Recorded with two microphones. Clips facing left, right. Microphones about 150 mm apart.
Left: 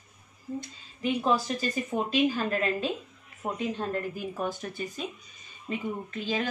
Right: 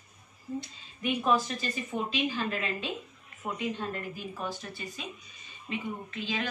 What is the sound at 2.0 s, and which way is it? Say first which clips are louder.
A woman's voice: left 6 dB; 45° left (ahead or behind).